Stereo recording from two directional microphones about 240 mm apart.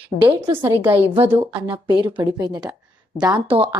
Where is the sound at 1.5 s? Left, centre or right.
Centre.